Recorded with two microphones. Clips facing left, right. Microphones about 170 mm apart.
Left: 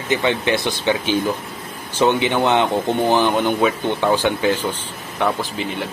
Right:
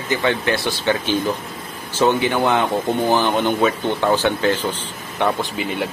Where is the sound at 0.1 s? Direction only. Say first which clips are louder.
Left 1 dB; 20° left (ahead or behind).